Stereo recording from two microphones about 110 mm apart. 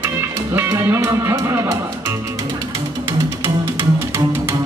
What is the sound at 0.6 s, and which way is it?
Speech, 25° right (ahead or behind).